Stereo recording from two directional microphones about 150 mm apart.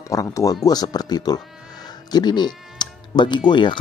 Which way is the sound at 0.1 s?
20° left (ahead or behind).